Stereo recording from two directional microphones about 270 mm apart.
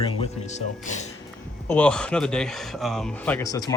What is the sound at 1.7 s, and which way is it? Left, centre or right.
Speech, centre.